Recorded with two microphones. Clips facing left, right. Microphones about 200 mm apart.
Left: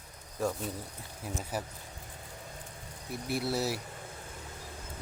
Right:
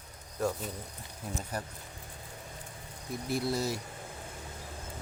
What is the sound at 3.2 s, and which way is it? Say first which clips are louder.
Speech: even; 5° left (ahead or behind).